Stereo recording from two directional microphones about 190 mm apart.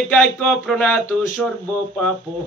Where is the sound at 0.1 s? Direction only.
Centre (ahead or behind).